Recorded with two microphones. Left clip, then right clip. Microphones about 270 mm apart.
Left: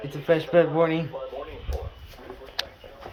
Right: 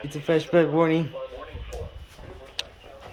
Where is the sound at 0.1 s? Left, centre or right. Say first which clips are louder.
Left 1 dB; centre.